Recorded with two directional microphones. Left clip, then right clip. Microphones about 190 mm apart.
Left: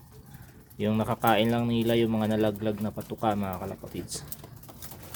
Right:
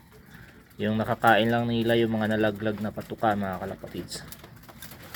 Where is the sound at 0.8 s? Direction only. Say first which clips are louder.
Right 2 dB; 15° left (ahead or behind).